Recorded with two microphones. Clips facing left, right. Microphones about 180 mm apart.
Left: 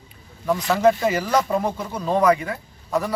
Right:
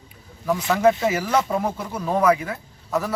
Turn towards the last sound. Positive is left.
turn(degrees=0)  # may be behind; listen again after turning